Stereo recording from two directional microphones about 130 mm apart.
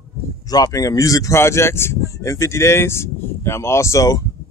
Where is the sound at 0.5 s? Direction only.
30° left (ahead or behind).